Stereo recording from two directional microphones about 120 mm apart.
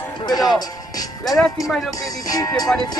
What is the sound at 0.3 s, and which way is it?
Speech, 35° left (ahead or behind).